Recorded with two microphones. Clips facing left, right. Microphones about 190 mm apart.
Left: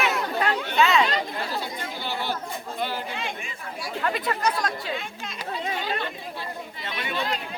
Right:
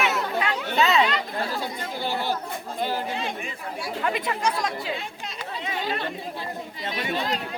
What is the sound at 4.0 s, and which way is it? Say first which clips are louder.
Speech: even; 15° right (ahead or behind).